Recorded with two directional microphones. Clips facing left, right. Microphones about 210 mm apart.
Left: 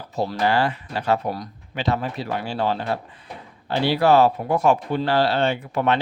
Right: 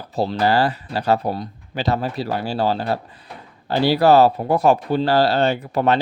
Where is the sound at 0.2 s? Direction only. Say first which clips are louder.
Right 3 dB; 35° right (ahead or behind).